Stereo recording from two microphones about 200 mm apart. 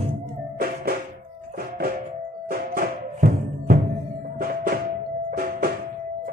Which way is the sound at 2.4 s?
45° right (ahead or behind).